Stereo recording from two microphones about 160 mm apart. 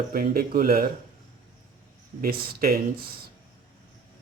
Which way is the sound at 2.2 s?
70° right (ahead or behind).